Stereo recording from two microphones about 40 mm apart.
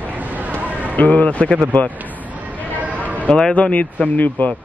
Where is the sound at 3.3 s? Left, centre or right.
Left.